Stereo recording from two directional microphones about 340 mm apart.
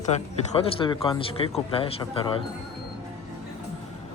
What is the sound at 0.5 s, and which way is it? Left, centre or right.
Speech, centre.